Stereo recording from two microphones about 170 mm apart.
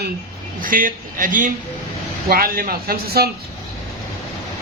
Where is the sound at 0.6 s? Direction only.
55° right (ahead or behind).